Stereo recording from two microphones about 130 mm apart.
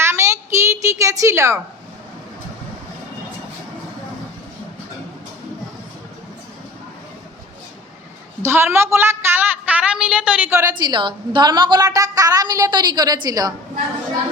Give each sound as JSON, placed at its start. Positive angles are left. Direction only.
{"t": 0.0, "sound": "a sound", "side_deg": -20}
{"t": 8.4, "sound": "a woman's voice", "side_deg": -20}
{"t": 10.5, "sound": "a woman's voice", "side_deg": -30}